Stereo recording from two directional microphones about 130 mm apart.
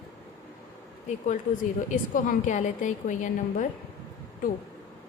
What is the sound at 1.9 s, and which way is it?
A woman's voice, 90° left.